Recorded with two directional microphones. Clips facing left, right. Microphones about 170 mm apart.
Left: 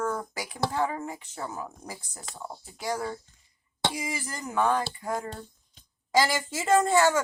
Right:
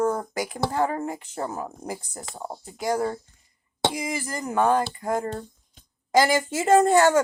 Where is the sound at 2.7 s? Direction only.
50° right (ahead or behind).